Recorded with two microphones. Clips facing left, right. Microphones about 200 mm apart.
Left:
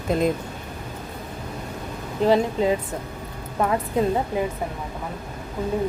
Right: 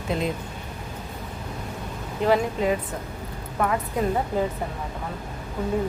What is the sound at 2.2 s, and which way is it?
Speech, 30° left (ahead or behind).